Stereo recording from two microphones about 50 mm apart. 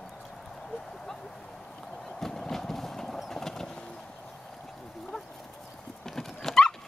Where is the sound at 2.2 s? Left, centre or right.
Centre.